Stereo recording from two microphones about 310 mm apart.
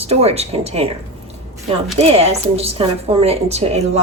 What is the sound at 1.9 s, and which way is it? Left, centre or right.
A woman's voice, centre.